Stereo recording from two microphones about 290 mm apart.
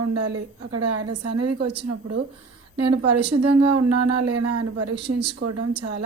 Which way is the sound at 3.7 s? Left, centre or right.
Right.